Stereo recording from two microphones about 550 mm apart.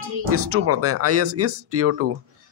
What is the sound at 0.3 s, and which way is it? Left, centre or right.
A man's voice, right.